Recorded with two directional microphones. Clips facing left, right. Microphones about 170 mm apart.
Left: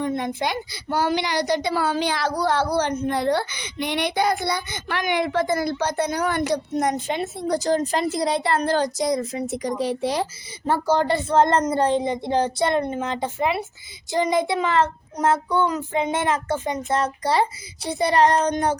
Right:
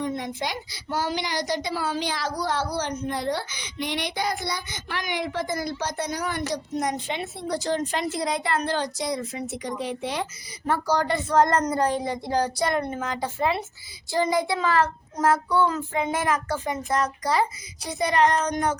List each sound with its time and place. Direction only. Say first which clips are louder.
0.0 s a child's voice: left 4 dB; 55° left (ahead or behind); by 10.2 s 35° left (ahead or behind)
10.7 s a child's voice: left 3 dB; 25° left (ahead or behind)